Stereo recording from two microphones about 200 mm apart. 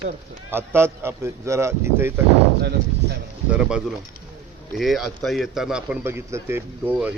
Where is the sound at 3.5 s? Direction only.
5° right (ahead or behind).